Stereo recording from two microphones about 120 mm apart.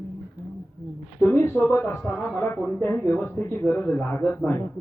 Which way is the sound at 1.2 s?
20° left (ahead or behind).